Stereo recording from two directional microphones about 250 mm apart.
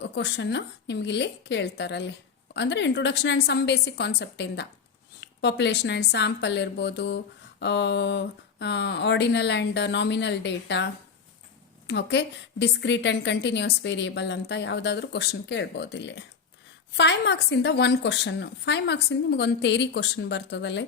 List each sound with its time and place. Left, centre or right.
0.0 s a woman's voice: left
11.9 s a woman's voice: left